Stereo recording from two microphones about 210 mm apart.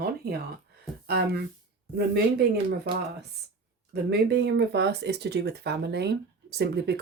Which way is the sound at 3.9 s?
50° right (ahead or behind).